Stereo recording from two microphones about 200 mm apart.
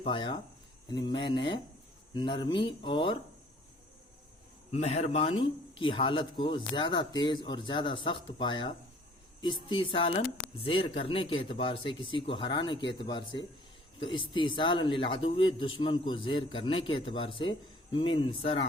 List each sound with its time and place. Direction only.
0.0 s speech: 25° left (ahead or behind)
4.7 s speech: 30° left (ahead or behind)